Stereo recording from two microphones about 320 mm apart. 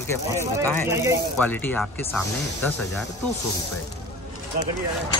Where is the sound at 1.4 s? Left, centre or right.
Centre.